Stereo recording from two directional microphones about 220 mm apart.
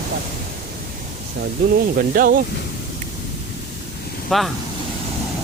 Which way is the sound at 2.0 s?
40° right (ahead or behind).